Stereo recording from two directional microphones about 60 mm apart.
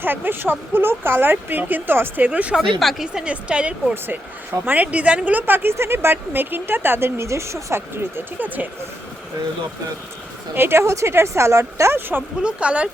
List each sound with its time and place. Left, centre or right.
0.0 s speech: right
2.6 s speech: centre
3.2 s a woman's voice: centre; by 5.7 s right
5.7 s speech: right
7.3 s speech: right
8.4 s a woman's voice: right
10.5 s speech: right
11.9 s speech: right
12.4 s a woman's voice: centre